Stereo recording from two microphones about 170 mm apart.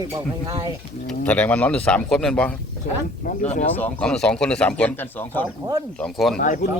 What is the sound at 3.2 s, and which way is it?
Speech, 45° left (ahead or behind).